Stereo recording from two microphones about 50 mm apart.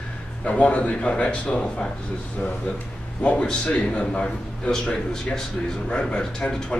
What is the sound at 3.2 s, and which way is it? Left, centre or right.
A man's voice, left.